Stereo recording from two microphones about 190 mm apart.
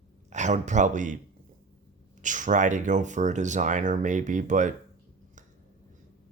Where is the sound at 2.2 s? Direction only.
40° right (ahead or behind).